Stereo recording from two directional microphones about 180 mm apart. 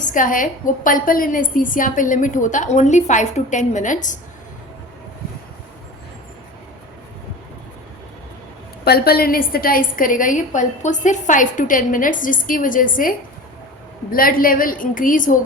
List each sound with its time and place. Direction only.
0.0 s a woman's voice: 45° left (ahead or behind)
8.8 s a woman's voice: 60° left (ahead or behind)